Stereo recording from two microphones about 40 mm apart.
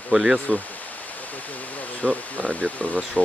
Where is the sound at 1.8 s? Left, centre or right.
Left.